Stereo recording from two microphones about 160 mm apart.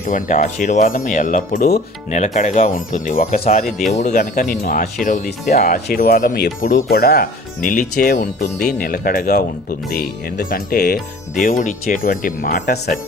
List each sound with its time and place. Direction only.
0.0 s speech: 55° left (ahead or behind)
2.0 s speech: 45° left (ahead or behind)
3.3 s speech: 45° left (ahead or behind); by 6.8 s 60° left (ahead or behind)
6.9 s speech: 75° left (ahead or behind)
11.4 s speech: 55° left (ahead or behind)